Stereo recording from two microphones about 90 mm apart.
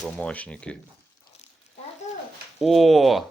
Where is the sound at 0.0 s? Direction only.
15° left (ahead or behind).